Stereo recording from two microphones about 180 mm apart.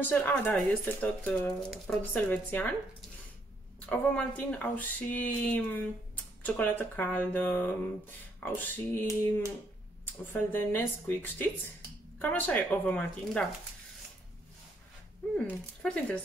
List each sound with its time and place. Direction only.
0.0 s speech: 10° left (ahead or behind)
3.8 s speech: 5° left (ahead or behind)
10.3 s speech: 10° left (ahead or behind)
15.3 s speech: 5° left (ahead or behind)